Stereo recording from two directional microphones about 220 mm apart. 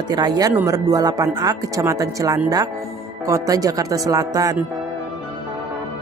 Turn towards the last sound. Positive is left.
turn(degrees=-15)  # may be behind; listen again after turning